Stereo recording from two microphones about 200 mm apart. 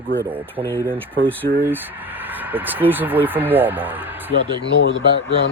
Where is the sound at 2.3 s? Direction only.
10° right (ahead or behind).